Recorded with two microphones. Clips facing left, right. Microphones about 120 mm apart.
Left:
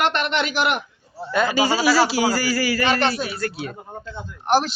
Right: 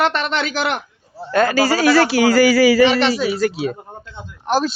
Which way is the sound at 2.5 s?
90° right.